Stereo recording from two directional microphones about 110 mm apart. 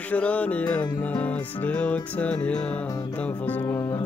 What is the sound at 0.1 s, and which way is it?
Music, 15° left (ahead or behind).